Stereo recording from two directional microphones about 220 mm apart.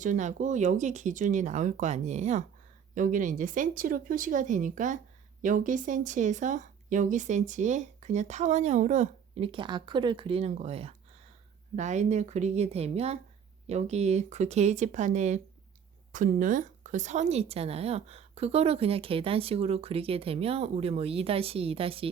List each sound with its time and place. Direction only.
0.0 s a woman's voice: 35° right (ahead or behind)